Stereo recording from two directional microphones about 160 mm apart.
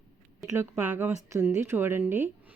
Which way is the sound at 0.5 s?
15° right (ahead or behind).